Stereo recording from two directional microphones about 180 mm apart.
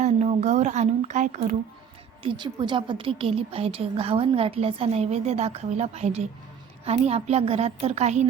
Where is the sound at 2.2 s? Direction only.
25° right (ahead or behind).